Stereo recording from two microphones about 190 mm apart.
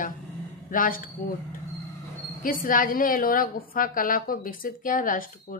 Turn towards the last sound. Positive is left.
turn(degrees=45)  # may be behind; listen again after turning